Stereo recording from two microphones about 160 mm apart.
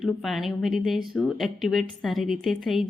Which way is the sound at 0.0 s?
Centre (ahead or behind).